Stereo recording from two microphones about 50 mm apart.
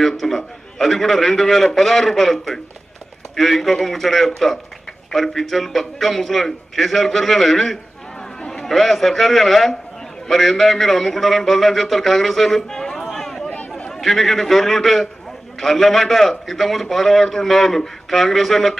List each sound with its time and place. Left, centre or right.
0.0 s a man's voice: centre
13.5 s a sound: left
13.9 s a man's voice: centre